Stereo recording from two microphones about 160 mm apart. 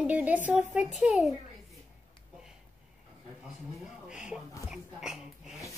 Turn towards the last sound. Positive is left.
turn(degrees=-5)  # may be behind; listen again after turning